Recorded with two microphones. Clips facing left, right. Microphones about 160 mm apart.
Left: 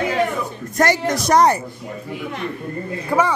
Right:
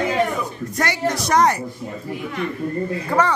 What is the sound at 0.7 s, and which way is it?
Speech, 45° left (ahead or behind).